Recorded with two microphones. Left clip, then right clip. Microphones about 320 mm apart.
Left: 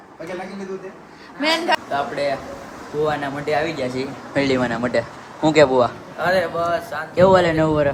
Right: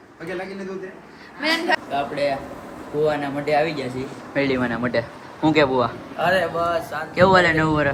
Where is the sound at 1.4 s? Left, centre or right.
Left.